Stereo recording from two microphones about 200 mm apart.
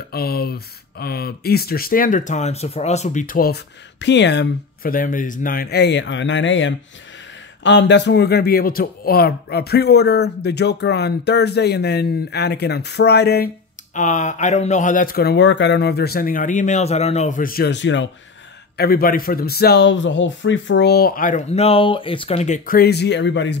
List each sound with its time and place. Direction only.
0.1 s speech: 50° left (ahead or behind)
13.9 s speech: 35° left (ahead or behind); by 18.1 s 65° left (ahead or behind)
18.8 s speech: 50° left (ahead or behind); by 22.6 s 30° left (ahead or behind)
22.7 s speech: 50° left (ahead or behind)